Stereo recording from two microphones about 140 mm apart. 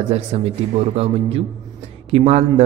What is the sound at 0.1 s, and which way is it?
A man's voice, 45° right (ahead or behind).